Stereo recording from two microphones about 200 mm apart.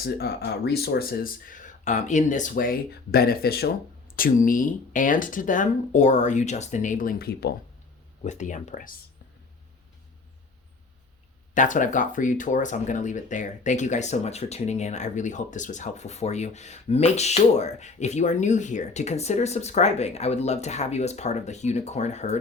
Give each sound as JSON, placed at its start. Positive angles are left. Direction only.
{"t": 0.0, "sound": "speech", "side_deg": 50}
{"t": 8.2, "sound": "speech", "side_deg": 35}
{"t": 11.5, "sound": "speech", "side_deg": 40}